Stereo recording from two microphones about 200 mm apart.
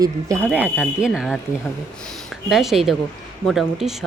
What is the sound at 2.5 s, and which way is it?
Speech, centre (ahead or behind).